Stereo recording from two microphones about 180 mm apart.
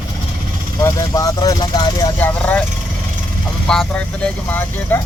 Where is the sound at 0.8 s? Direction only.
20° left (ahead or behind).